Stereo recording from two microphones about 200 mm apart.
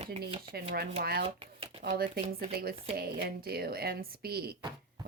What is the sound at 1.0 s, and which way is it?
Speech, 50° right (ahead or behind).